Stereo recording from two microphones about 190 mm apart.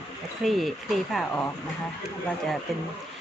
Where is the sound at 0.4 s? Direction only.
Centre (ahead or behind).